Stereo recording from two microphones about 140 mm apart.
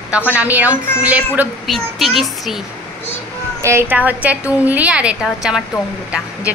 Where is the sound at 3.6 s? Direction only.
20° right (ahead or behind).